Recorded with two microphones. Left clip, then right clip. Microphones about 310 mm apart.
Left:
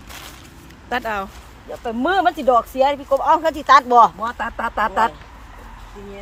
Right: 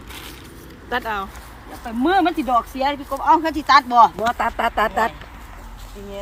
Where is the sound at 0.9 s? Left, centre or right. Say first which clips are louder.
Left 1 dB; centre.